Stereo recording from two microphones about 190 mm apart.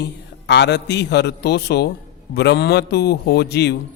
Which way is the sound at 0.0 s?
60° left (ahead or behind).